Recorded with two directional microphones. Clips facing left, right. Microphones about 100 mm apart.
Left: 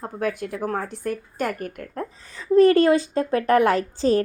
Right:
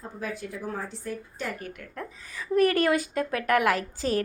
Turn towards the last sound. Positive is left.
turn(degrees=30)  # may be behind; listen again after turning